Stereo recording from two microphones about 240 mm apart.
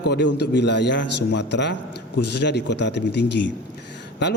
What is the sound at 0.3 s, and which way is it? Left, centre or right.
A man's voice, left.